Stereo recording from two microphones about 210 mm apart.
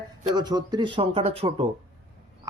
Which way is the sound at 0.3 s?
20° right (ahead or behind).